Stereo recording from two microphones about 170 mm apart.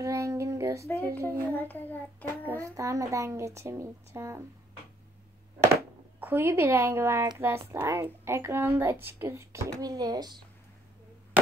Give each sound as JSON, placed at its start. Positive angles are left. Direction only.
{"t": 0.0, "sound": "child singing", "side_deg": -20}
{"t": 1.0, "sound": "speech", "side_deg": -15}
{"t": 1.5, "sound": "child singing", "side_deg": 10}
{"t": 2.4, "sound": "speech", "side_deg": -20}
{"t": 5.7, "sound": "speech", "side_deg": -10}